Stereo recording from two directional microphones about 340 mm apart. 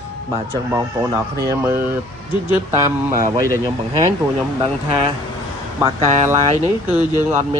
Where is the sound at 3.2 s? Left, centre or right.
Centre.